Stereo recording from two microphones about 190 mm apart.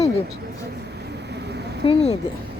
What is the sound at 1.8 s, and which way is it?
Speech, 35° left (ahead or behind).